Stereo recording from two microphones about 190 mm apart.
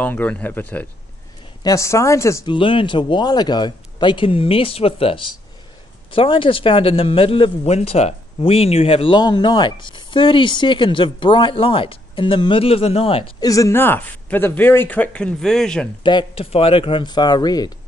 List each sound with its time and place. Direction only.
0.0 s speech: 10° left (ahead or behind)
16.0 s speech: 25° left (ahead or behind)